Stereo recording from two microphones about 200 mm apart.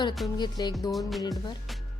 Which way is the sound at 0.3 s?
20° left (ahead or behind).